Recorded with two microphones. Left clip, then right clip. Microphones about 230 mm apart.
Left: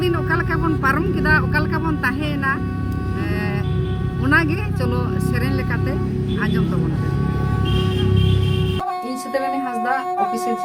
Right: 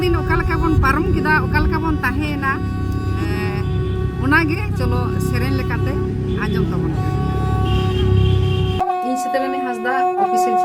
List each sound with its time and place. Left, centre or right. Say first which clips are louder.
0.0 s speech: right 1 dB; centre
4.3 s speech: right 1 dB; centre